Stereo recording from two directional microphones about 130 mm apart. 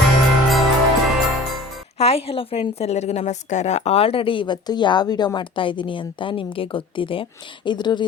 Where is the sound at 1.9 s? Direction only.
50° left (ahead or behind); by 8.0 s 35° left (ahead or behind).